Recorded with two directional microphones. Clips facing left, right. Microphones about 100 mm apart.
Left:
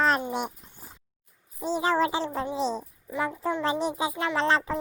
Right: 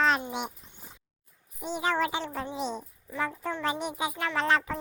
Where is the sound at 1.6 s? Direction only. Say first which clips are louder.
Left 4 dB; 30° left (ahead or behind).